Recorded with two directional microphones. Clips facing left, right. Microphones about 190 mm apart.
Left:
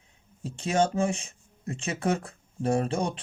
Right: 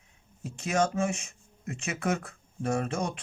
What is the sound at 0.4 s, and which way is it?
Speech, 30° left (ahead or behind).